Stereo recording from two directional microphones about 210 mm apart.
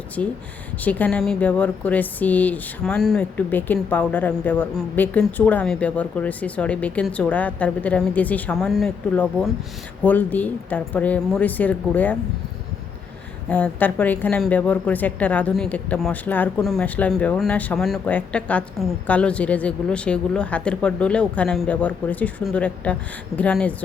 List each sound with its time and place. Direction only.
0.2 s a woman's voice: 5° left (ahead or behind)
13.5 s a woman's voice: 10° left (ahead or behind)